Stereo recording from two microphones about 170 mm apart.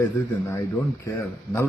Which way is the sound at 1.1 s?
15° left (ahead or behind).